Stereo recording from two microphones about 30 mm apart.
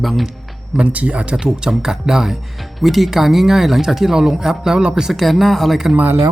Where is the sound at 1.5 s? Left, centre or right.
Centre.